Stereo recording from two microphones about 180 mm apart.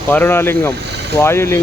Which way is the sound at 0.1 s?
10° left (ahead or behind).